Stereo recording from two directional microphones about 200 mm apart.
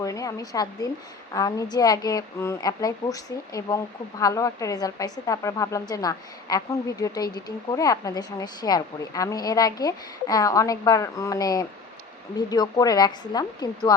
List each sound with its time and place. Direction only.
0.0 s a woman's voice: 15° left (ahead or behind)